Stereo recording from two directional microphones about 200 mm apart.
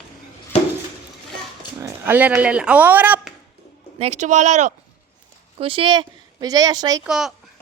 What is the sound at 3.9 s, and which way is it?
Speech, 35° right (ahead or behind).